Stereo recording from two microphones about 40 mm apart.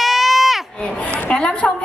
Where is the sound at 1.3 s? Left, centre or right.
Left.